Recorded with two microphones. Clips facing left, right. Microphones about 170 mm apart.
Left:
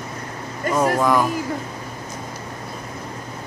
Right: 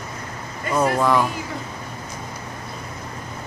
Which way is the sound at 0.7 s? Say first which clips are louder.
Left 1 dB; 45° left (ahead or behind).